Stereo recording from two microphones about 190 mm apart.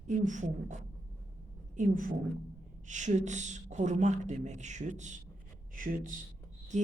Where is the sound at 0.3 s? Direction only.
40° right (ahead or behind).